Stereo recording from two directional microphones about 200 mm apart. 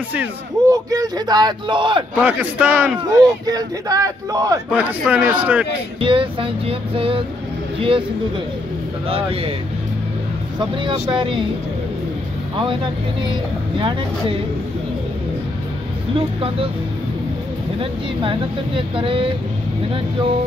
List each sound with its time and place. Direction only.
0.1 s a man's voice: 15° right (ahead or behind)
2.1 s a man's voice: 5° right (ahead or behind)
3.2 s a man's voice: 20° right (ahead or behind)
5.9 s a man's voice: 25° right (ahead or behind)
9.1 s a man's voice: 30° right (ahead or behind)
10.6 s a man's voice: 25° right (ahead or behind)
13.7 s a man's voice: 25° right (ahead or behind)
16.2 s a man's voice: 30° right (ahead or behind)
18.8 s a man's voice: 25° right (ahead or behind)